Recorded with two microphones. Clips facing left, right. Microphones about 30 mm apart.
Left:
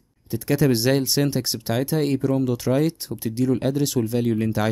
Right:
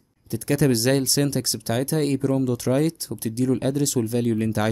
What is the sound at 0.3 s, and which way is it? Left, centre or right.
Speech, centre.